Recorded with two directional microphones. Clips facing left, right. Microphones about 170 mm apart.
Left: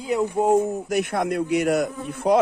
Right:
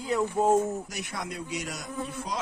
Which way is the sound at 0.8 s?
60° left (ahead or behind).